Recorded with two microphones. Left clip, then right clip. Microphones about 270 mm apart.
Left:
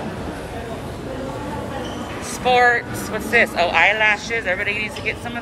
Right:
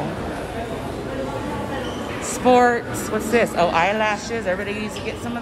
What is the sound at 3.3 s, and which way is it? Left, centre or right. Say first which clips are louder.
Speech: left 2 dB; right.